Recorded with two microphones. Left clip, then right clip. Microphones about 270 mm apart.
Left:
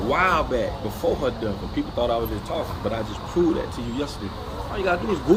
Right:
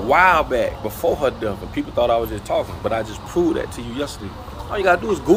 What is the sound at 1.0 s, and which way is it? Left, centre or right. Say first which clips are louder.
Speech: right 4 dB; right.